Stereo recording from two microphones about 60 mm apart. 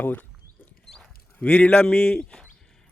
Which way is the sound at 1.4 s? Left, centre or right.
Left.